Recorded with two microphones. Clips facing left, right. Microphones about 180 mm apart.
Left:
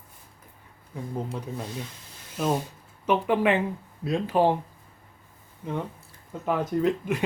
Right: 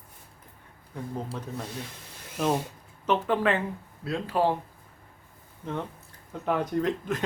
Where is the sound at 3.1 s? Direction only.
10° left (ahead or behind).